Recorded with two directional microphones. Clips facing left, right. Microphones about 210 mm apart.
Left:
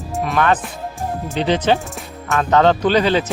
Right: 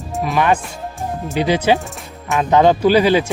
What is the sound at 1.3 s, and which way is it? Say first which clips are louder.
Speech: right 1 dB; 10° right (ahead or behind).